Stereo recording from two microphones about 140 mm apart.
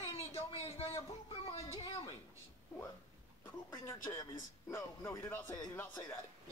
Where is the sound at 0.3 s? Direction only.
40° left (ahead or behind).